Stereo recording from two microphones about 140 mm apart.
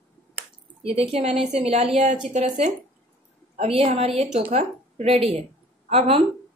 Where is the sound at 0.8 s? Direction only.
45° right (ahead or behind).